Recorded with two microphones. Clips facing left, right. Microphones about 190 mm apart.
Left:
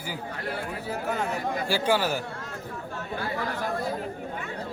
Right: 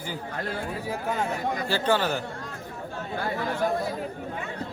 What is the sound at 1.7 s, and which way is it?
Speech, 10° left (ahead or behind).